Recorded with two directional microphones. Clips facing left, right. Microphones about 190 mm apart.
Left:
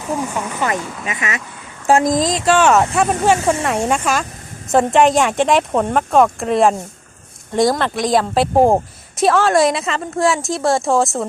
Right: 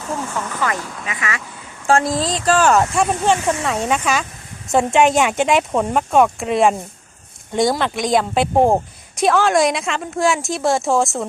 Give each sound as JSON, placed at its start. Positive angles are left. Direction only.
{"t": 0.0, "sound": "speech", "side_deg": 15}
{"t": 1.0, "sound": "speech", "side_deg": 20}